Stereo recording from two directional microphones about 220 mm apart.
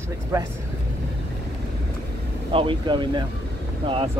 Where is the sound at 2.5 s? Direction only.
25° right (ahead or behind).